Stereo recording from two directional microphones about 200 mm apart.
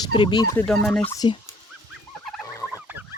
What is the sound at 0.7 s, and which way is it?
Speech, 5° left (ahead or behind).